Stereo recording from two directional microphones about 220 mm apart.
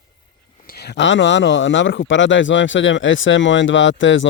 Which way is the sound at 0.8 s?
55° left (ahead or behind).